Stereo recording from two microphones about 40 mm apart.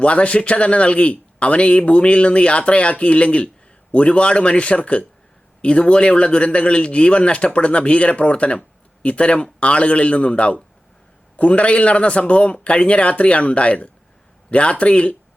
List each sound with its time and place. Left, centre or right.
0.0 s a man's voice: left